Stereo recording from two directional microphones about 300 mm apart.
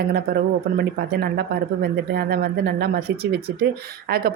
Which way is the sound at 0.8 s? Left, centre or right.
Right.